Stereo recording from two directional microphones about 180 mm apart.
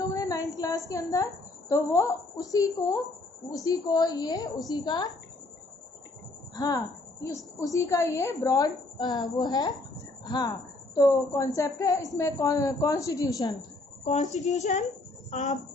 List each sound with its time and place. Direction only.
0.0 s a sound: 20° left (ahead or behind)
1.7 s a woman's voice: 15° left (ahead or behind)
6.5 s a woman's voice: 20° left (ahead or behind)
13.6 s speech: 45° left (ahead or behind)